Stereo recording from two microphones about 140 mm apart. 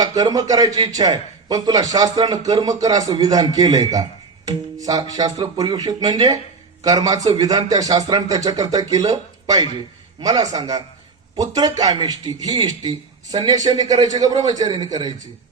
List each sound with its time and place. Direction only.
0.0 s a man's voice: 25° right (ahead or behind)